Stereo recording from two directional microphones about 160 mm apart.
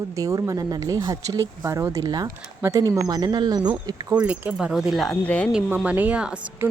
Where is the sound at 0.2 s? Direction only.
20° right (ahead or behind).